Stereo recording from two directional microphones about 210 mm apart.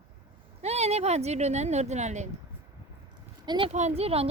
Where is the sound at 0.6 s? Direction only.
30° right (ahead or behind).